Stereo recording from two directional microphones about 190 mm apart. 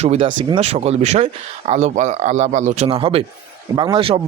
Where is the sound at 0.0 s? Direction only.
30° right (ahead or behind).